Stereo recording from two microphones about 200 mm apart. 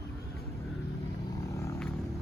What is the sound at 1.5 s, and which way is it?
Vehicle, 15° left (ahead or behind).